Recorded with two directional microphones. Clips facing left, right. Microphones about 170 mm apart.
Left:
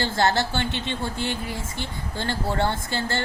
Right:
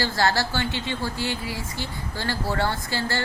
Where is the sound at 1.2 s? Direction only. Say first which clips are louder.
Even; 55° left (ahead or behind).